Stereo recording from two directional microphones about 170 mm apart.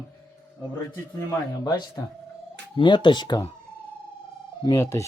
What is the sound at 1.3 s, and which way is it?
Speech, 25° left (ahead or behind).